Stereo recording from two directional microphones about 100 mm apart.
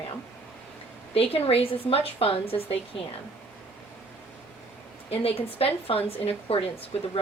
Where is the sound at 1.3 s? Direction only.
70° left (ahead or behind).